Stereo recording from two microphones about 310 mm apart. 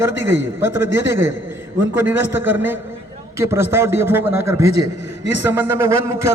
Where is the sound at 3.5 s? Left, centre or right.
Centre.